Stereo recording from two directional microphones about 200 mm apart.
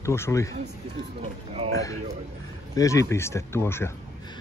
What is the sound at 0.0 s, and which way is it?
Speech, 15° left (ahead or behind).